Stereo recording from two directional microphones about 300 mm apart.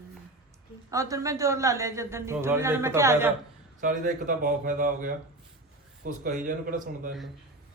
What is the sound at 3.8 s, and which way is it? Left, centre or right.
Speech, right.